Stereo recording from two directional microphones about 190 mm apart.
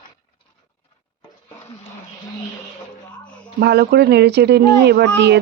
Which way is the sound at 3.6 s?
60° right (ahead or behind).